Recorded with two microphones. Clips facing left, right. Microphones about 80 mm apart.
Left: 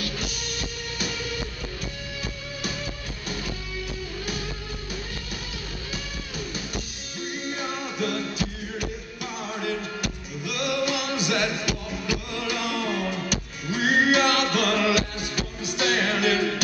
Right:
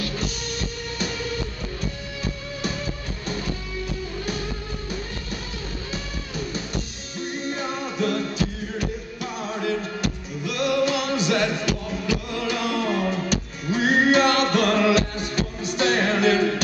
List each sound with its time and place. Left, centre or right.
0.0 s music: centre
5.9 s music: centre